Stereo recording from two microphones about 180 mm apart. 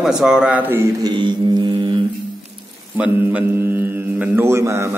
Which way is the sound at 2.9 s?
10° right (ahead or behind).